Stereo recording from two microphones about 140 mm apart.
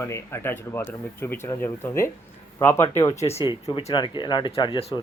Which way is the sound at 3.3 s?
40° left (ahead or behind).